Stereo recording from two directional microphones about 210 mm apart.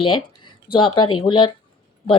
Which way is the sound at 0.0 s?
20° left (ahead or behind).